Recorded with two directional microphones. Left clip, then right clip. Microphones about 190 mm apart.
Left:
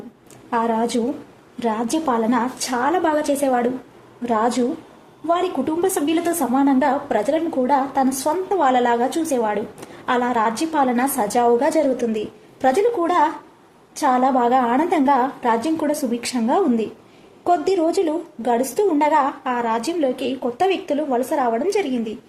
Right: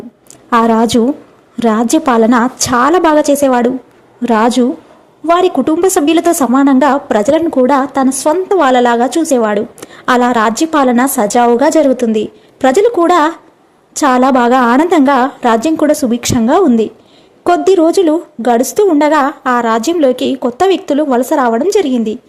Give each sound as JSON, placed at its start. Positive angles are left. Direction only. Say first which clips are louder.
{"t": 0.7, "sound": "a woman's voice", "louder": "right 10 dB", "side_deg": -45}